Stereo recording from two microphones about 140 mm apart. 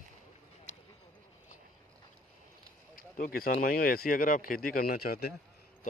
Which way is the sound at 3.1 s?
90° left.